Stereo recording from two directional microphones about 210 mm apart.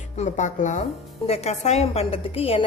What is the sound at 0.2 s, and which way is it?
A woman's voice, 35° left (ahead or behind).